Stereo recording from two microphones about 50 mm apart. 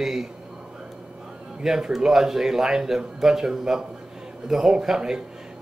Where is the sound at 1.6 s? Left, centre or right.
Centre.